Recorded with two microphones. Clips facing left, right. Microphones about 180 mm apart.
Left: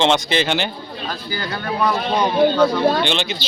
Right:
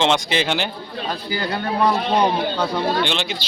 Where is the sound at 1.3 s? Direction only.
35° right (ahead or behind).